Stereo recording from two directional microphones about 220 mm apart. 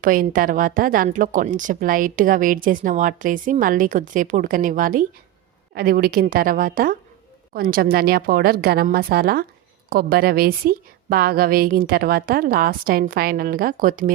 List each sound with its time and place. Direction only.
0.0 s a woman's voice: 40° right (ahead or behind)